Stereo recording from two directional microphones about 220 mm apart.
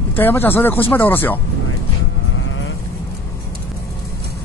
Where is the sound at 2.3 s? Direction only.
60° left (ahead or behind).